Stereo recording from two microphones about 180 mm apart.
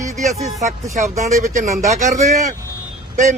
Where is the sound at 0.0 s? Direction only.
40° right (ahead or behind).